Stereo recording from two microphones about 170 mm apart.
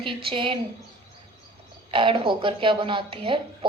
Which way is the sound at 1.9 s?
30° right (ahead or behind).